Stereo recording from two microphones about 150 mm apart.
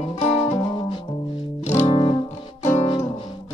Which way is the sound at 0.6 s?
35° left (ahead or behind).